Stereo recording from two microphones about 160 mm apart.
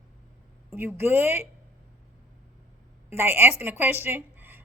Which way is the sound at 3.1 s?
15° right (ahead or behind).